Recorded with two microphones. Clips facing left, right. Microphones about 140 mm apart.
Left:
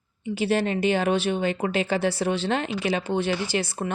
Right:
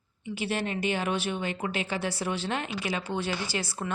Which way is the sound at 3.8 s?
65° left (ahead or behind).